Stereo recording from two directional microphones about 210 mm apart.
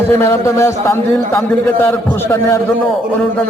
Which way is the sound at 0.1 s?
10° left (ahead or behind).